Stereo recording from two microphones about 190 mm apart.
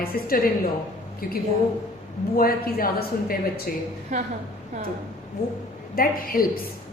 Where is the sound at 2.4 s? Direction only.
50° left (ahead or behind).